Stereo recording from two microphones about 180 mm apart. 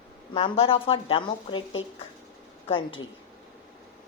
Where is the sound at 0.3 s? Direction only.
30° left (ahead or behind).